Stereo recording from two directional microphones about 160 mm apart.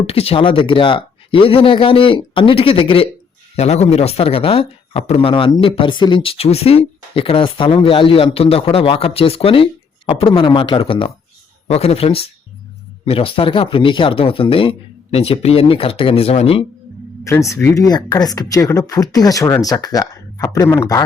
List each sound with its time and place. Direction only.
0.1 s speech: 35° left (ahead or behind)
17.5 s speech: 20° left (ahead or behind)